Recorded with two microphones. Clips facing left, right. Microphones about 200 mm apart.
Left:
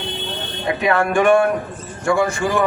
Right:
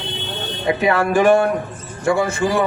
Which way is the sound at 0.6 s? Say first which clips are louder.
Right 1 dB; 25° right (ahead or behind).